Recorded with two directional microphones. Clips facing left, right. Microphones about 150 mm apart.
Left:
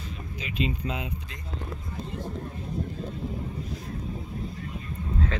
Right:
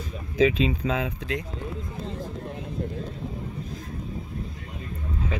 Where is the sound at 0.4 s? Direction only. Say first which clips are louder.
Right 10 dB; 90° right.